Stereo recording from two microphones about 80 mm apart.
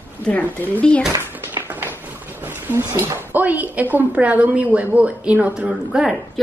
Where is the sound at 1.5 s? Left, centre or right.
Right.